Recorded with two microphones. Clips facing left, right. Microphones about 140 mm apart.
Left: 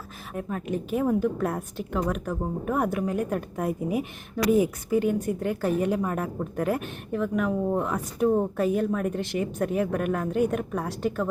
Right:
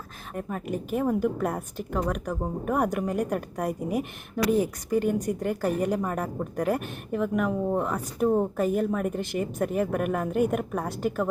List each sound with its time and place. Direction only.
0.3 s speech: 5° right (ahead or behind)
3.7 s speech: 45° right (ahead or behind)
4.5 s speech: 10° left (ahead or behind)
5.4 s a woman's voice: 5° right (ahead or behind)